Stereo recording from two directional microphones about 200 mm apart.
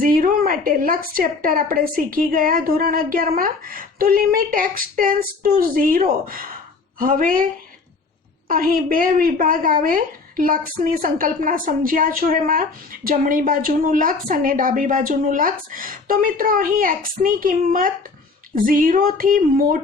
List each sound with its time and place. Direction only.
0.0 s a woman's voice: 45° right (ahead or behind)
8.4 s a woman's voice: 45° right (ahead or behind)